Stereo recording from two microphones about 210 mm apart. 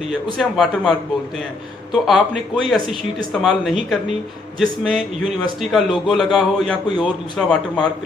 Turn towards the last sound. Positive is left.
turn(degrees=0)  # may be behind; listen again after turning